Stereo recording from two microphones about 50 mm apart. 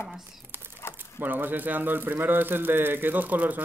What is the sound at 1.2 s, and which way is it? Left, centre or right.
A man's voice, right.